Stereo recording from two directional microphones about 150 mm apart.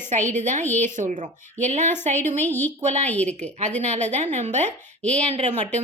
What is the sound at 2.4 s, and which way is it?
Speech, 15° left (ahead or behind).